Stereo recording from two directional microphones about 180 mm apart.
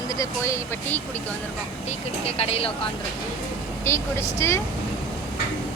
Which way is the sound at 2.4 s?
35° left (ahead or behind).